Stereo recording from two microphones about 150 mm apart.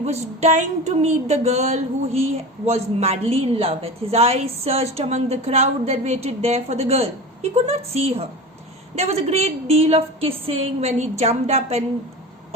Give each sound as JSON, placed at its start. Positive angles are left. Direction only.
{"t": 0.0, "sound": "a woman's voice", "side_deg": -45}